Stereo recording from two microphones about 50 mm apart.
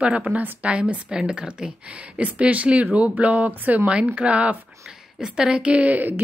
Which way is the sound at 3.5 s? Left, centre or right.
Right.